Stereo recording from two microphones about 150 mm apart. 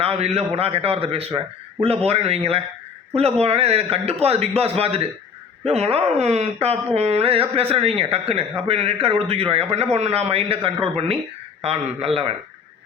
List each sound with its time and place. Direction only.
0.0 s a man's voice: 40° right (ahead or behind)